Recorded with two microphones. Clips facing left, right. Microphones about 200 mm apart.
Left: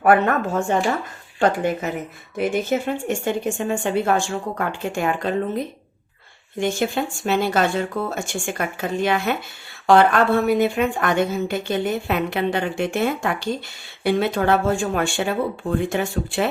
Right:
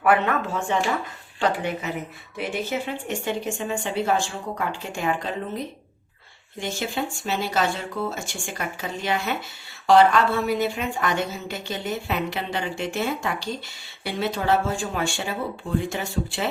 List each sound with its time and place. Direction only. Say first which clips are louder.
0.0 s speech: left 4 dB; 45° left (ahead or behind)
6.6 s speech: left 6 dB; 55° left (ahead or behind)